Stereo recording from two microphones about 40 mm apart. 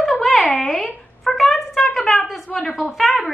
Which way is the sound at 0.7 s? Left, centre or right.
Centre.